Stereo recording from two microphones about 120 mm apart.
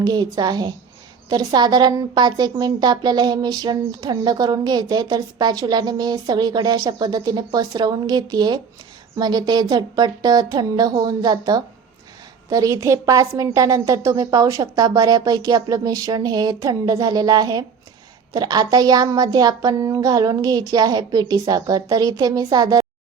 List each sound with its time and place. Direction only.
0.0 s a woman's voice: 35° right (ahead or behind)